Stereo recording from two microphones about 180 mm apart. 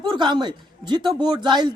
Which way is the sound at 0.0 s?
25° right (ahead or behind).